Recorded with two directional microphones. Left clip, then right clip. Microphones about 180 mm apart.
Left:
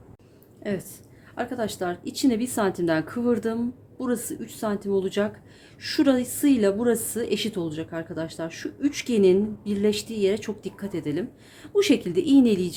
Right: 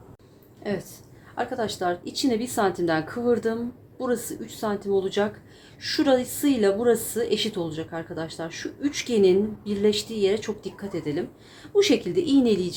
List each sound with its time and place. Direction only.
0.7 s a woman's voice: 35° left (ahead or behind)